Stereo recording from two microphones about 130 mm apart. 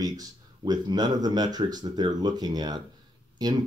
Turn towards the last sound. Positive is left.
turn(degrees=-30)  # may be behind; listen again after turning